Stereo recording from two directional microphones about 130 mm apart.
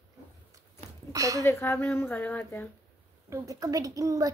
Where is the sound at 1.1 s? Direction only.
25° right (ahead or behind).